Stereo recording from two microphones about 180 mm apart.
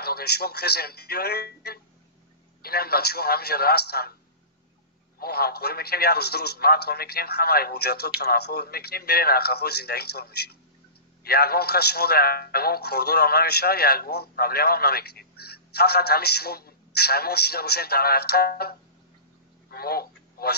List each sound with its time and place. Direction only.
0.0 s a man's voice: 60° left (ahead or behind)
5.2 s a man's voice: 60° left (ahead or behind)
19.7 s a sound: 60° left (ahead or behind)